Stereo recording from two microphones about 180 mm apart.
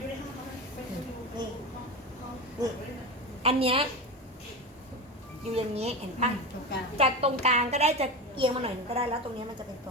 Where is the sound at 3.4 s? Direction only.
30° right (ahead or behind).